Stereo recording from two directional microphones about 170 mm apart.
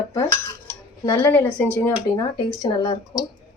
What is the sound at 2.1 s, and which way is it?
A woman's voice, 25° left (ahead or behind).